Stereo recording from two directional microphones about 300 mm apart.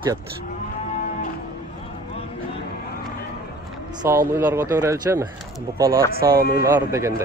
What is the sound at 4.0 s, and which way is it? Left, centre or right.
Speech, centre.